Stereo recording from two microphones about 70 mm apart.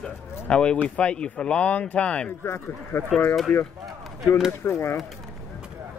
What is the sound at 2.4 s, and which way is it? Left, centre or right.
Speech, left.